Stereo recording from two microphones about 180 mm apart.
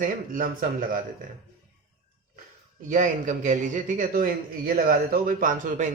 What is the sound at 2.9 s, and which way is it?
A man's voice, 45° right (ahead or behind).